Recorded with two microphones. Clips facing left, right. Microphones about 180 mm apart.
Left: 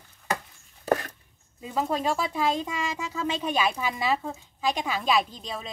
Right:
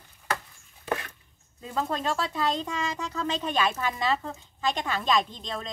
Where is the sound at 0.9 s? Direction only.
40° left (ahead or behind).